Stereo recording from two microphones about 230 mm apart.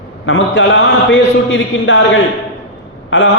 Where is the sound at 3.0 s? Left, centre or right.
Left.